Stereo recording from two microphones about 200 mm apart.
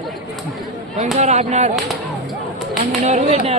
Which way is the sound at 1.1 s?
35° right (ahead or behind).